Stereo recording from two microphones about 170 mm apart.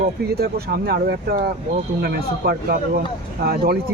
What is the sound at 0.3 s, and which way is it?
Speech, 65° right (ahead or behind).